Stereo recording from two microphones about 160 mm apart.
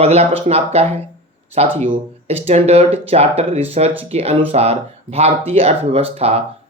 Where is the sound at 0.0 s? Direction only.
40° right (ahead or behind).